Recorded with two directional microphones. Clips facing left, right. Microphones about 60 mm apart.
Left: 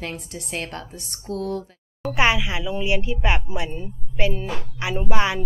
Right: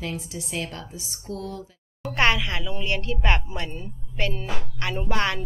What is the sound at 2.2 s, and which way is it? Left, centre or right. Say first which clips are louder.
A woman's voice: left 1 dB; centre.